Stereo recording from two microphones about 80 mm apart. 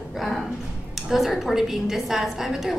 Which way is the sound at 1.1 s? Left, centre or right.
Centre.